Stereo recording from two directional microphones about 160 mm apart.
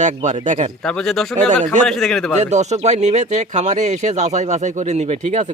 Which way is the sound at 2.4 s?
45° right (ahead or behind).